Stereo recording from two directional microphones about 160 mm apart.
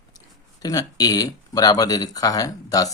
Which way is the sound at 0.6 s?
25° left (ahead or behind).